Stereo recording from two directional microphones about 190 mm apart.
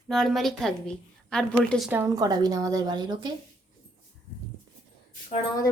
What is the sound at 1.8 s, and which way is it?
A woman's voice, 10° right (ahead or behind).